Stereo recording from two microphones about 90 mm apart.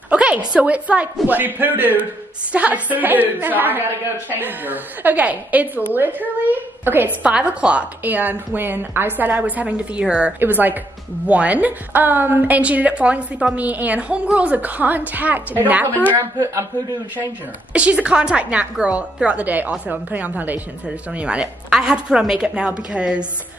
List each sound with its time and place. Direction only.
0.1 s a sound: 15° right (ahead or behind)
0.5 s a woman's voice: 15° right (ahead or behind)
7.2 s a woman's voice: 10° right (ahead or behind)
17.7 s a woman's voice: 10° right (ahead or behind)